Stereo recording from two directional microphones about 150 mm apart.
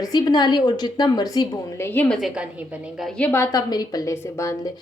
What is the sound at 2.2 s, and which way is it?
A woman's voice, 5° right (ahead or behind).